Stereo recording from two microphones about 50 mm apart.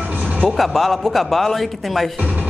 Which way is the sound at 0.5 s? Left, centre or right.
Centre.